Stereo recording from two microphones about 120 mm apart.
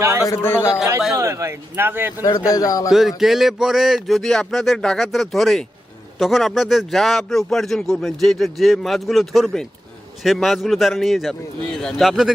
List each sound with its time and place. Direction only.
0.3 s a man's voice: 20° left (ahead or behind)
1.1 s speech: 25° right (ahead or behind)
2.5 s a man's voice: 30° left (ahead or behind)
2.9 s a man's voice: centre (ahead or behind)